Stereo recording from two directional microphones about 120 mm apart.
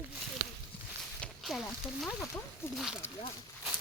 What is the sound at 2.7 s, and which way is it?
Speech, 5° right (ahead or behind).